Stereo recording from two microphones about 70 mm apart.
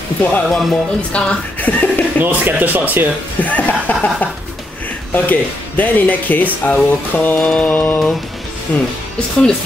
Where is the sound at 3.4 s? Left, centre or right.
Left.